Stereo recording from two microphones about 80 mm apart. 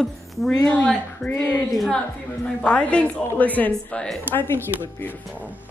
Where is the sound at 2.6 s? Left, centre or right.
Centre.